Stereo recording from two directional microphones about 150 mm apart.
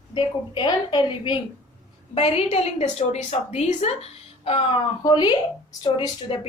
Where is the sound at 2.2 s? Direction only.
40° left (ahead or behind).